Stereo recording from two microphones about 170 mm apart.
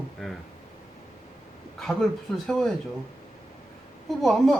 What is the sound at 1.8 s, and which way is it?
Speech, centre (ahead or behind).